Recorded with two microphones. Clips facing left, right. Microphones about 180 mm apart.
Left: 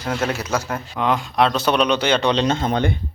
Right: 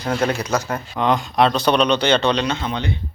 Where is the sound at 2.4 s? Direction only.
45° left (ahead or behind).